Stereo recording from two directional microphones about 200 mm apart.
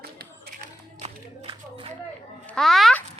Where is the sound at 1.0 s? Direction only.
30° right (ahead or behind).